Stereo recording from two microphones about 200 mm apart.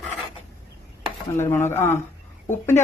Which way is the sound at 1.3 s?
10° left (ahead or behind).